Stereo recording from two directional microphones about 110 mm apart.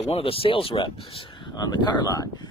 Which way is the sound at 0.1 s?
55° left (ahead or behind).